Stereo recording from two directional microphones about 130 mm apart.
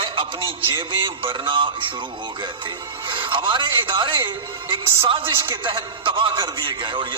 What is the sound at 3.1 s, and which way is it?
A man's voice, 40° right (ahead or behind).